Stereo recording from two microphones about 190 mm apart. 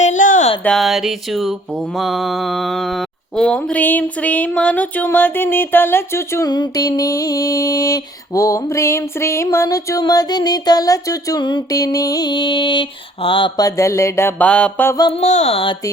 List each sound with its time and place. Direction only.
0.0 s a sound: 40° left (ahead or behind)
0.6 s mantra: centre (ahead or behind)
14.9 s music: 25° left (ahead or behind)
15.2 s speech: 35° left (ahead or behind)